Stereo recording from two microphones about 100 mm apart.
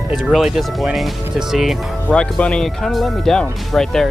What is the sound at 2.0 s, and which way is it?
Speech, 10° left (ahead or behind).